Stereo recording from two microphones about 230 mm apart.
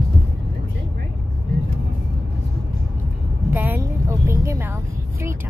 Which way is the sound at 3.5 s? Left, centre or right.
Centre.